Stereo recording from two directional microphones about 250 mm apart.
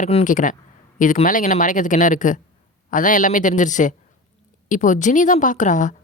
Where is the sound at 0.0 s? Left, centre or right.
Left.